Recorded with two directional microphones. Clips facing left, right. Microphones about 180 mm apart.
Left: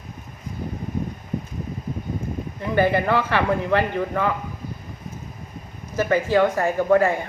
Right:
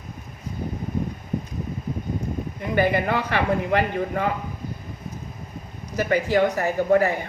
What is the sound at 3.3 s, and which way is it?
Speech, 50° left (ahead or behind).